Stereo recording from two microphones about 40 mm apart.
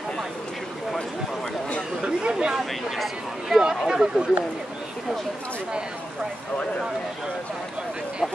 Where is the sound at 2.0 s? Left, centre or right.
Right.